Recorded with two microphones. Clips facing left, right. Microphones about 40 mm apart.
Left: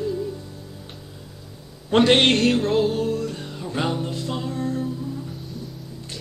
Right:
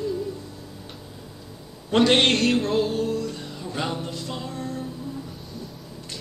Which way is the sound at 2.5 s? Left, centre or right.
Centre.